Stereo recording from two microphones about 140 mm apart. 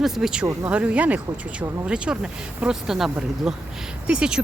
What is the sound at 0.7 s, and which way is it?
Speech, 10° right (ahead or behind).